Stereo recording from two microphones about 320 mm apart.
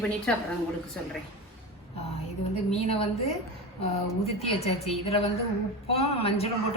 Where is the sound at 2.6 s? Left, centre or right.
Centre.